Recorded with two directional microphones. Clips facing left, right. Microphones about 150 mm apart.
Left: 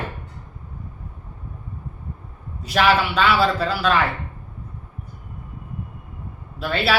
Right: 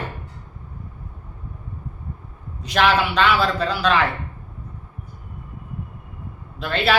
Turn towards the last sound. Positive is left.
turn(degrees=5)  # may be behind; listen again after turning